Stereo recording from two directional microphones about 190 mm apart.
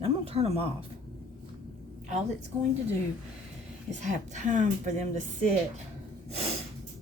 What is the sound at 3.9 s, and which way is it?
A woman's voice, 40° right (ahead or behind).